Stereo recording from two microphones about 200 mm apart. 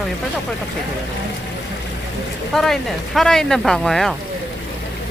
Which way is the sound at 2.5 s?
Centre (ahead or behind).